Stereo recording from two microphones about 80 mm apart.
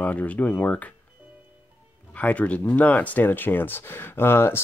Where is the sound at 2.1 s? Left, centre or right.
Centre.